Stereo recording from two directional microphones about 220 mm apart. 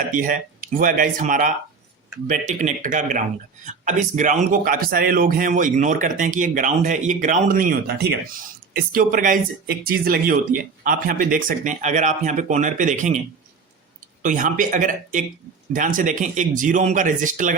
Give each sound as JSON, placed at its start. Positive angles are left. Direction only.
{"t": 0.1, "sound": "speech", "side_deg": -40}
{"t": 14.2, "sound": "speech", "side_deg": -35}